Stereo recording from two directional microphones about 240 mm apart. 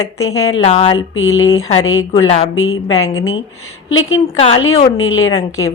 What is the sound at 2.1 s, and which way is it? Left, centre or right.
Speech, left.